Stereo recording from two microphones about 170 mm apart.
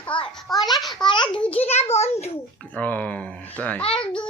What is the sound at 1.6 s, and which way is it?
Speech, 40° left (ahead or behind).